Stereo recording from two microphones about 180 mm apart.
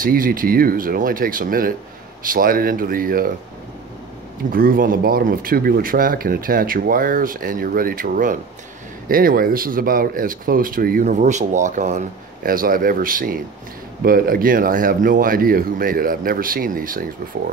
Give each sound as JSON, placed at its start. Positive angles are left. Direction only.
{"t": 0.0, "sound": "speech", "side_deg": -50}
{"t": 4.5, "sound": "speech", "side_deg": -55}